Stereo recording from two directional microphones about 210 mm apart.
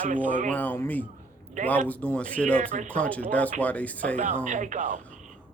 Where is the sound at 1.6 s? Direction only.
35° right (ahead or behind).